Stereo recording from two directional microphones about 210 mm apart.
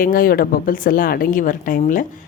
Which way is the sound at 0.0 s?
40° left (ahead or behind).